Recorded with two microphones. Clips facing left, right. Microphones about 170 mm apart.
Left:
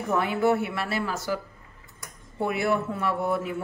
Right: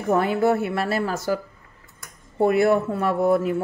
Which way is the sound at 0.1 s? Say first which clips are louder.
Right 4 dB; 40° right (ahead or behind).